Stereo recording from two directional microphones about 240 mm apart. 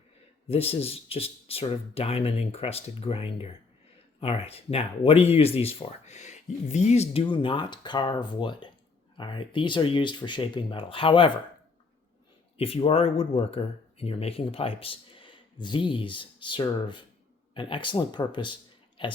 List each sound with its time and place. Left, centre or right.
0.4 s speech: left
12.5 s speech: left